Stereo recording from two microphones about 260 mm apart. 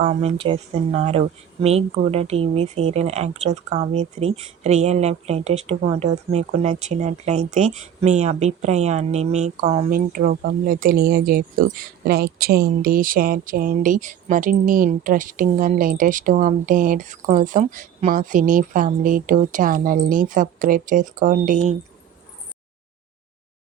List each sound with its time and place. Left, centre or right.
0.0 s speech: right